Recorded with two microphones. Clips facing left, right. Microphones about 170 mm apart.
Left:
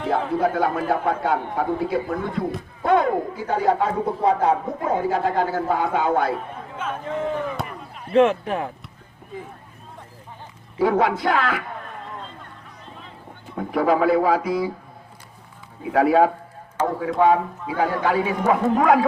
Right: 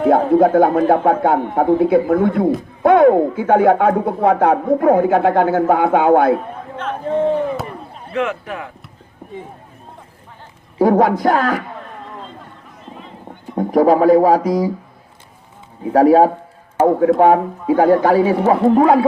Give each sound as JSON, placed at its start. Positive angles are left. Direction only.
{"t": 0.0, "sound": "a man's voice", "side_deg": -45}
{"t": 0.9, "sound": "speech", "side_deg": -55}
{"t": 7.0, "sound": "speech", "side_deg": -35}
{"t": 8.1, "sound": "speech", "side_deg": 30}
{"t": 10.8, "sound": "a man's voice", "side_deg": -45}
{"t": 12.8, "sound": "boat", "side_deg": 0}
{"t": 13.6, "sound": "speech", "side_deg": -40}
{"t": 15.8, "sound": "speech", "side_deg": -40}
{"t": 16.8, "sound": "a man's voice", "side_deg": -55}